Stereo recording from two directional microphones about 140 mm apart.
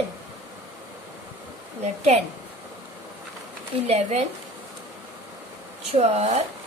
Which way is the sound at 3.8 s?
50° right (ahead or behind).